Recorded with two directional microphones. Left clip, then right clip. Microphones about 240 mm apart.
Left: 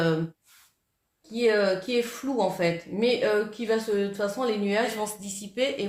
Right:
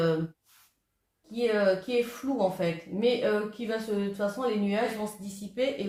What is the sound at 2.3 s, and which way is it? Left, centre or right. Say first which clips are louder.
Speech: left 3 dB; left.